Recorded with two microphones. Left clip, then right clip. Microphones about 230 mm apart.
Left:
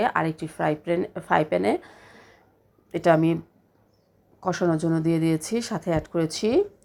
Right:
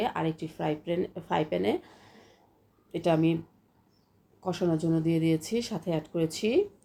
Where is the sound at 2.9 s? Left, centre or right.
Left.